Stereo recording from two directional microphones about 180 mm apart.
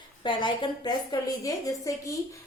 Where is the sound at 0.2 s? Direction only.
25° left (ahead or behind).